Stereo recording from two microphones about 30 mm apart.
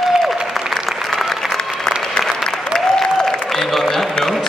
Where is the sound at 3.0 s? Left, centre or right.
Centre.